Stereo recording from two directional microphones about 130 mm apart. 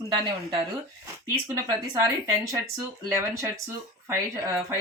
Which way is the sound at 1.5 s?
25° right (ahead or behind).